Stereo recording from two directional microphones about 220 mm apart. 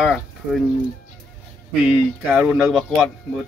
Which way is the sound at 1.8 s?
5° right (ahead or behind).